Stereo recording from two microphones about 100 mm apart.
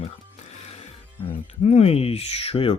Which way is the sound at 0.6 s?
90° left.